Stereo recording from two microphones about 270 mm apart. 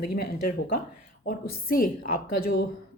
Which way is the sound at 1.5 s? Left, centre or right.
Left.